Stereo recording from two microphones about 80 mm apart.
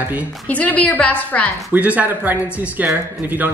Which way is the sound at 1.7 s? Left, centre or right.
Centre.